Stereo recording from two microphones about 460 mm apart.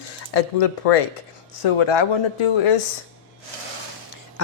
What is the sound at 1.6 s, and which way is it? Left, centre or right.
Speech, left.